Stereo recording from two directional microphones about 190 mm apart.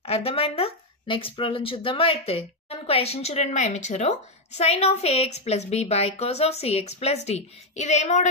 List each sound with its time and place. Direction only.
0.0 s speech: 30° left (ahead or behind)